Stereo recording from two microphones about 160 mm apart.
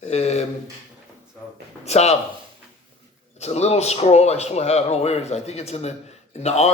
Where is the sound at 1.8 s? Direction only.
45° left (ahead or behind).